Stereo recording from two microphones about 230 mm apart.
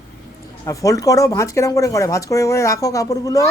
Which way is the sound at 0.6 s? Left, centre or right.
Centre.